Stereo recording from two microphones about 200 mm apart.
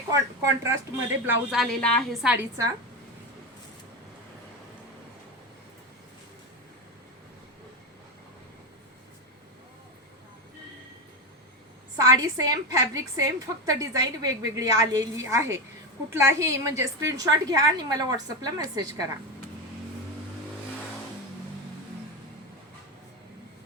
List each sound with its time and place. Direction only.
0.1 s a woman's voice: 15° right (ahead or behind)
1.3 s a woman's voice: centre (ahead or behind)
2.3 s a woman's voice: 10° right (ahead or behind)
11.9 s a woman's voice: 15° right (ahead or behind)